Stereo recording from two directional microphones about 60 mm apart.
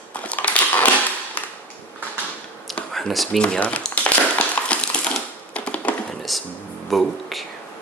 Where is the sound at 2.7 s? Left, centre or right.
Centre.